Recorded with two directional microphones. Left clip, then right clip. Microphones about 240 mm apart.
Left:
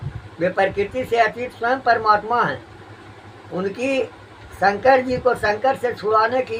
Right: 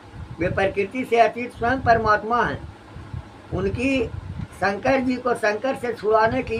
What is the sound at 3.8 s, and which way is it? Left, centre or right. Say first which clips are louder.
Speech: left 3 dB; centre.